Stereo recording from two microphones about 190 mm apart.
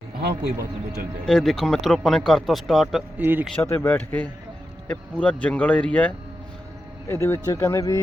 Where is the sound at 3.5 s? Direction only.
10° left (ahead or behind).